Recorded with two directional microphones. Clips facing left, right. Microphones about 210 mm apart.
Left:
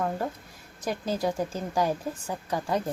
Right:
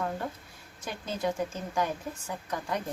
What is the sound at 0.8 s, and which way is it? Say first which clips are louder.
A woman's voice: left 5 dB; 35° left (ahead or behind).